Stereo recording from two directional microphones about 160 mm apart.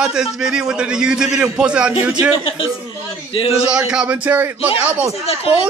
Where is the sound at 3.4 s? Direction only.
40° left (ahead or behind).